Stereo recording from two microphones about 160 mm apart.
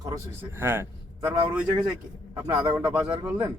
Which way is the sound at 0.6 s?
15° right (ahead or behind).